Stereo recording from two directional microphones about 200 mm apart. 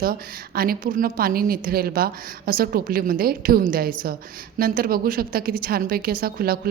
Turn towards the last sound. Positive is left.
turn(degrees=-50)  # may be behind; listen again after turning